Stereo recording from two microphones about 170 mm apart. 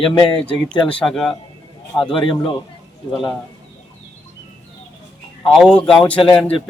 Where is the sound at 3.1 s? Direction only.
Centre (ahead or behind).